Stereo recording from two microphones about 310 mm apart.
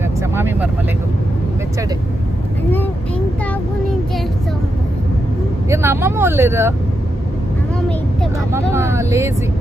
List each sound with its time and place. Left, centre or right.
0.2 s speech: centre
5.6 s speech: centre
8.5 s speech: centre